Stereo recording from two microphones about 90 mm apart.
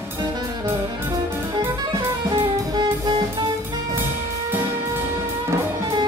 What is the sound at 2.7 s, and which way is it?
Jazz, 55° right (ahead or behind).